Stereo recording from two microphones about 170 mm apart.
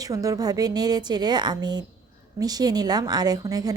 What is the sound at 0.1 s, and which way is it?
A woman's voice, 20° right (ahead or behind).